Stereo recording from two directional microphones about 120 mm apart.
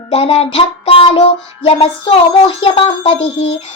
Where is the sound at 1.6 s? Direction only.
55° left (ahead or behind).